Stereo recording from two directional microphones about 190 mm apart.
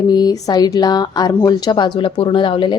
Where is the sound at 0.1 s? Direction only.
20° left (ahead or behind).